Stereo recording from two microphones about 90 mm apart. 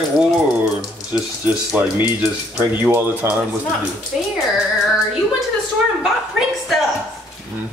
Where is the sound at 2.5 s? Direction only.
20° right (ahead or behind).